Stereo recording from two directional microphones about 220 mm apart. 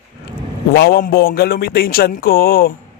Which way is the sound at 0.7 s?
45° left (ahead or behind).